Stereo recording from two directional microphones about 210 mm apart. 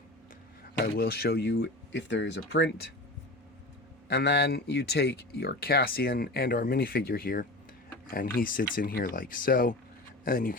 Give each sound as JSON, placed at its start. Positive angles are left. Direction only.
{"t": 0.9, "sound": "speech", "side_deg": 45}
{"t": 4.1, "sound": "speech", "side_deg": 50}